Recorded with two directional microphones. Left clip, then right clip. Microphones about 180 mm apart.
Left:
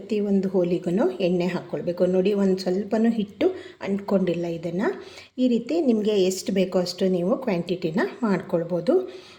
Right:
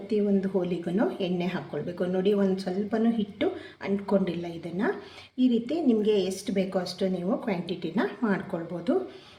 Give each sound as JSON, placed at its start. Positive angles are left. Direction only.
{"t": 0.4, "sound": "speech", "side_deg": 35}